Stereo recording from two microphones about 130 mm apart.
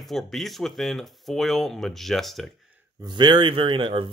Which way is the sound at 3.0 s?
35° right (ahead or behind).